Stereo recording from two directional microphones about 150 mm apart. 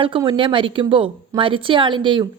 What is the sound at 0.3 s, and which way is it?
Speech, 35° right (ahead or behind).